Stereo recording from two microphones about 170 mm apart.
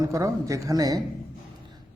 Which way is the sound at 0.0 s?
20° right (ahead or behind).